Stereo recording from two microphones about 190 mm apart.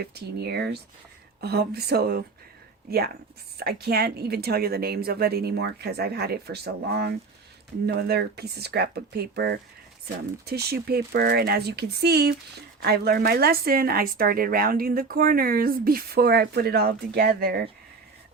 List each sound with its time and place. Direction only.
0.0 s speech: 55° right (ahead or behind)